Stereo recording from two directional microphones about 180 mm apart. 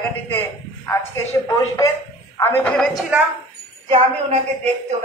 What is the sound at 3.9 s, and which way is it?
Speech, 35° right (ahead or behind).